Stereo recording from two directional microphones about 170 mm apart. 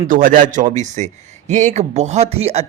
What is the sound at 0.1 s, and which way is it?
Speech, 55° right (ahead or behind).